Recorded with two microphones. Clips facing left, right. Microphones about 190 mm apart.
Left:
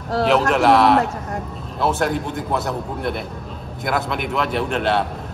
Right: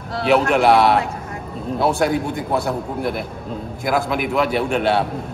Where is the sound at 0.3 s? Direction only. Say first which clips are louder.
Right 2 dB; centre (ahead or behind).